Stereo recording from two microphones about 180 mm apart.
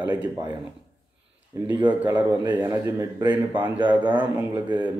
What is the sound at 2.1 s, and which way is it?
A man's voice, 25° right (ahead or behind).